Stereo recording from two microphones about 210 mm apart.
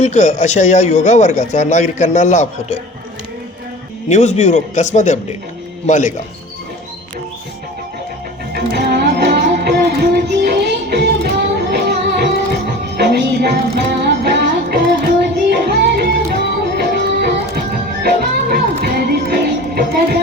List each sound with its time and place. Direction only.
0.0 s a man's voice: 35° left (ahead or behind)
4.1 s a man's voice: 35° left (ahead or behind)
8.7 s music: 50° right (ahead or behind)